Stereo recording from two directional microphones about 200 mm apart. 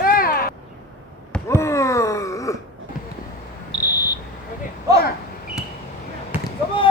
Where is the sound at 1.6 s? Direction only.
15° left (ahead or behind).